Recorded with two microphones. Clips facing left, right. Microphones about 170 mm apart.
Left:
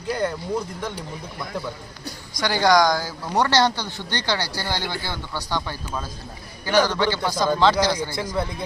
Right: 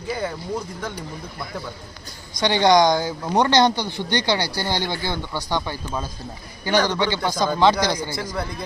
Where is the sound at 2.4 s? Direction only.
20° right (ahead or behind).